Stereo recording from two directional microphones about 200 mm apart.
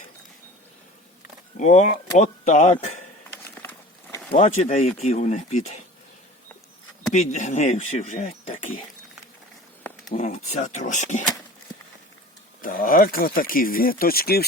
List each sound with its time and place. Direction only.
1.5 s speech: 35° left (ahead or behind)
3.2 s a sound: 10° left (ahead or behind)
4.4 s speech: 35° left (ahead or behind)
7.1 s speech: 35° left (ahead or behind)
10.1 s speech: 40° left (ahead or behind)
12.6 s speech: 45° left (ahead or behind)